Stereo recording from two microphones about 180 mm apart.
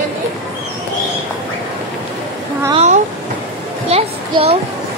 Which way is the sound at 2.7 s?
35° right (ahead or behind).